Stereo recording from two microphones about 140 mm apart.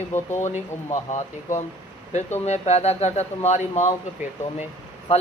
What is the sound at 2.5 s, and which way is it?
Speech, 50° left (ahead or behind).